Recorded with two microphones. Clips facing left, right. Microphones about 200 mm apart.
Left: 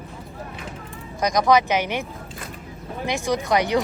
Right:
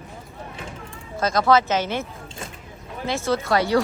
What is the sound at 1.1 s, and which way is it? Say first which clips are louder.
Speech: even; 15° left (ahead or behind).